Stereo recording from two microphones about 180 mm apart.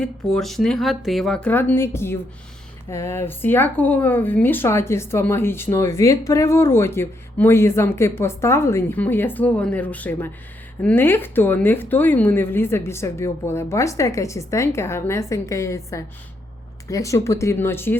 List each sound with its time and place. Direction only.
0.0 s speech: 5° left (ahead or behind)